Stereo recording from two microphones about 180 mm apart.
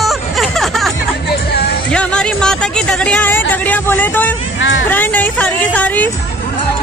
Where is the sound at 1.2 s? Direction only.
65° left (ahead or behind).